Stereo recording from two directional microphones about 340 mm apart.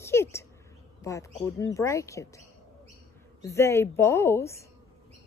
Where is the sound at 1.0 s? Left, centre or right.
Centre.